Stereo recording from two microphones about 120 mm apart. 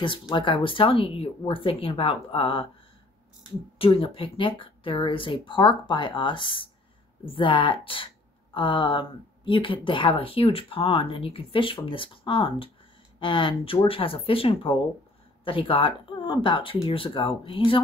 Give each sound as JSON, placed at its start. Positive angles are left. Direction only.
{"t": 0.0, "sound": "speech", "side_deg": 40}
{"t": 3.7, "sound": "speech", "side_deg": 50}